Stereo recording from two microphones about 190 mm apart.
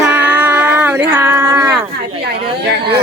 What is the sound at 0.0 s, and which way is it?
Music, 5° right (ahead or behind).